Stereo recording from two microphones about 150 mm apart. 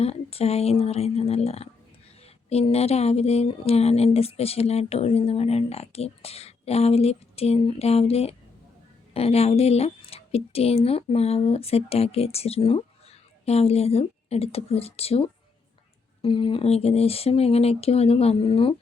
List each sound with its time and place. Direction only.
0.0 s speech: 40° left (ahead or behind)